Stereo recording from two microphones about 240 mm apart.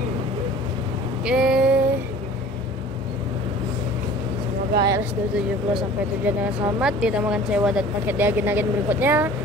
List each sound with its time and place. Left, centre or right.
1.2 s a sound: centre
4.7 s speech: centre
5.3 s speech: centre